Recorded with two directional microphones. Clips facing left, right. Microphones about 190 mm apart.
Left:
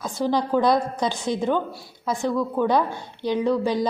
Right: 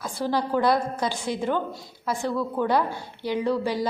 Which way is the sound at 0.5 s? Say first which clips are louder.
Left 2 dB; 15° left (ahead or behind).